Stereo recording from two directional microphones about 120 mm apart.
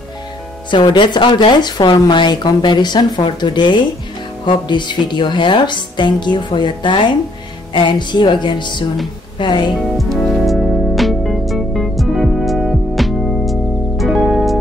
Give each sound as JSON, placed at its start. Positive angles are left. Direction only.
{"t": 0.7, "sound": "speech", "side_deg": 40}
{"t": 9.8, "sound": "music", "side_deg": 0}